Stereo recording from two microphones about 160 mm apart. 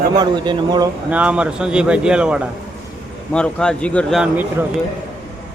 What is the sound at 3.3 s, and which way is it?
A man's voice, 5° left (ahead or behind).